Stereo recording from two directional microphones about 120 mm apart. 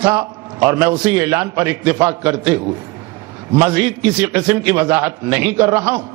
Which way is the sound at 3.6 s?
25° right (ahead or behind).